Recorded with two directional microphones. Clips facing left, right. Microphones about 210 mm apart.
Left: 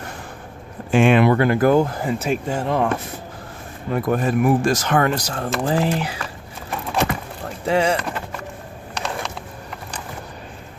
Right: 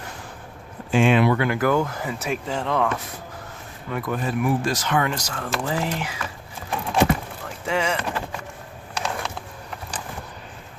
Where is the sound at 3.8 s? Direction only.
40° left (ahead or behind).